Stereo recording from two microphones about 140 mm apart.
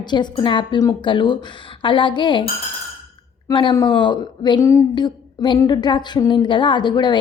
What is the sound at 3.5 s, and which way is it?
A woman's voice, 35° left (ahead or behind).